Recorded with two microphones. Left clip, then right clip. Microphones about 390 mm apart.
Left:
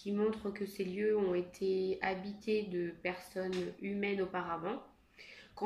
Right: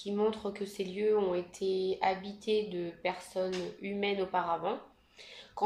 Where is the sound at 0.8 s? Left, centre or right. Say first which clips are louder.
Right 4 dB; right.